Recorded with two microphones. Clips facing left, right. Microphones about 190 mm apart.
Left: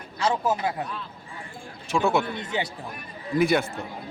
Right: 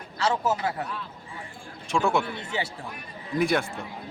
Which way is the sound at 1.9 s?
5° left (ahead or behind).